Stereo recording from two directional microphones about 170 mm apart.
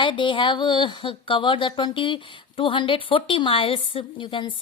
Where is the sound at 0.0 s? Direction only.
30° left (ahead or behind).